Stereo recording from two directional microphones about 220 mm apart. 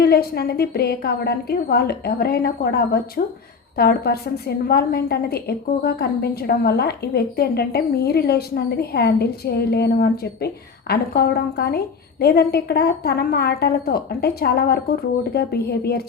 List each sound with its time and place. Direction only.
0.0 s a woman's voice: 45° left (ahead or behind)